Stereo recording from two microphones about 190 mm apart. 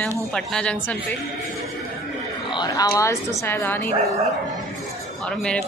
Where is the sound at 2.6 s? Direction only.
20° left (ahead or behind).